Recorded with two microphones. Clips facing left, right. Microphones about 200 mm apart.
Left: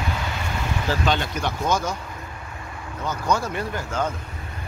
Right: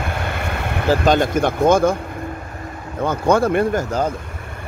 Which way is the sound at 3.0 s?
55° right (ahead or behind).